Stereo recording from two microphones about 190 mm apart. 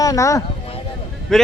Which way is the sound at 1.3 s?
Centre (ahead or behind).